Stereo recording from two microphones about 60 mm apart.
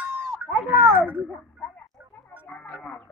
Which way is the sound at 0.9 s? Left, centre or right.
Right.